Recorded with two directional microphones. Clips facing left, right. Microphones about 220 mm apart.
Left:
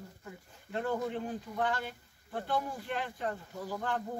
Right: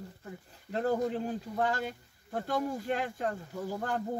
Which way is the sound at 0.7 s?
35° right (ahead or behind).